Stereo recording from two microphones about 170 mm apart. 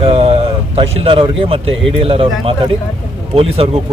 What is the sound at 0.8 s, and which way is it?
Speech, 30° right (ahead or behind).